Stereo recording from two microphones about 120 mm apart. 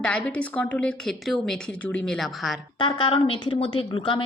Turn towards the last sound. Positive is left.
turn(degrees=45)  # may be behind; listen again after turning